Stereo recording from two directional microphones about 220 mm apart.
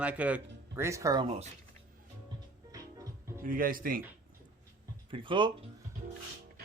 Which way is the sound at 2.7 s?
15° right (ahead or behind).